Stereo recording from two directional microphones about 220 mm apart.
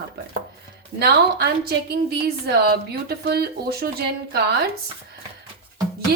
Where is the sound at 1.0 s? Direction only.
45° right (ahead or behind).